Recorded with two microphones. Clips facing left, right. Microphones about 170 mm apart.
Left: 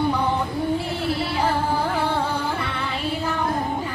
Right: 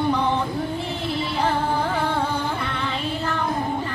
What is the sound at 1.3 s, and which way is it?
Music, 5° left (ahead or behind).